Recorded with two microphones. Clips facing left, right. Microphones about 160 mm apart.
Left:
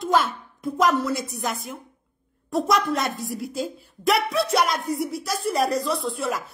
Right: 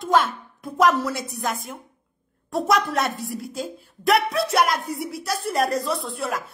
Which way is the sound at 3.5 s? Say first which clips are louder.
Left 2 dB; 50° right (ahead or behind).